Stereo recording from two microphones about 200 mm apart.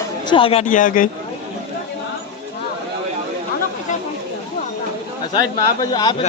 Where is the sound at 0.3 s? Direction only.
25° left (ahead or behind).